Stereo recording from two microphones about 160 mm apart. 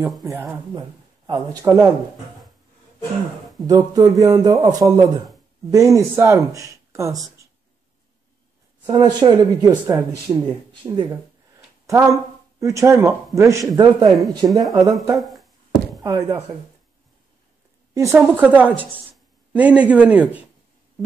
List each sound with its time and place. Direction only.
0.7 s speech: 25° right (ahead or behind)
1.6 s speech: 15° right (ahead or behind)
3.6 s speech: 25° right (ahead or behind)
8.8 s speech: 25° right (ahead or behind)
10.9 s speech: 20° right (ahead or behind)
12.5 s speech: 20° right (ahead or behind)
15.1 s a sound: centre (ahead or behind)
16.0 s speech: 20° right (ahead or behind)
17.9 s speech: 20° right (ahead or behind)